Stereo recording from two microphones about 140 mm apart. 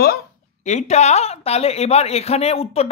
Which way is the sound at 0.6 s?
55° left (ahead or behind).